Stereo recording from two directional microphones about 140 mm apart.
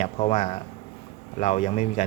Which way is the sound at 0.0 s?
50° left (ahead or behind).